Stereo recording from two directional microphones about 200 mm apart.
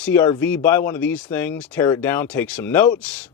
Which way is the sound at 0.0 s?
10° left (ahead or behind).